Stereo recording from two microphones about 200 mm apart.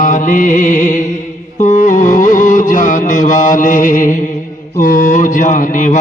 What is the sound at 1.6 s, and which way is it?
Music, 40° left (ahead or behind).